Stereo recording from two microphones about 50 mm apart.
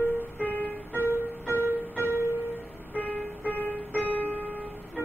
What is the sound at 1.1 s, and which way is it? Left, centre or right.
Music, right.